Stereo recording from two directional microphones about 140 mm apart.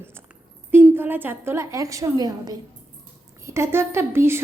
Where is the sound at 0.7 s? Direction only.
15° right (ahead or behind).